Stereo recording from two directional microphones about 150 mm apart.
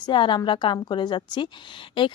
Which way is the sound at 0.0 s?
30° left (ahead or behind).